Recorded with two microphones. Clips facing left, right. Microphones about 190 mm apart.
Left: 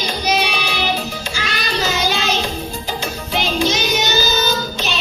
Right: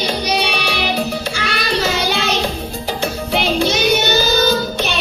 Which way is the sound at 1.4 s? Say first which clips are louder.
Right 1 dB; 60° right (ahead or behind).